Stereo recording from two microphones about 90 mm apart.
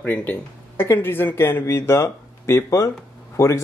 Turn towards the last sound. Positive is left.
turn(degrees=35)  # may be behind; listen again after turning